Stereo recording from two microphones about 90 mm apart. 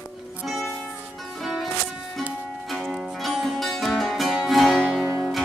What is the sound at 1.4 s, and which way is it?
Music, centre (ahead or behind).